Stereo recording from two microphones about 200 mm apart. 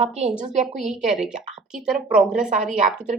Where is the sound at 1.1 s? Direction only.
5° right (ahead or behind).